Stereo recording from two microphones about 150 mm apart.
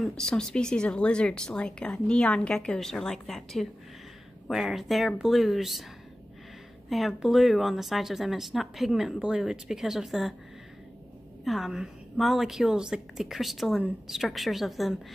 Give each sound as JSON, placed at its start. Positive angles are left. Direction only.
{"t": 0.0, "sound": "a woman's voice", "side_deg": 5}
{"t": 6.9, "sound": "a woman's voice", "side_deg": 0}
{"t": 11.4, "sound": "a woman's voice", "side_deg": 0}